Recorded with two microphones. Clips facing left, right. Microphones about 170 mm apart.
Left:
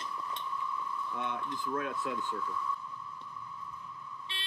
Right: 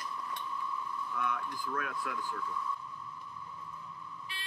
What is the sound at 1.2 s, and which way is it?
Speech, 25° left (ahead or behind).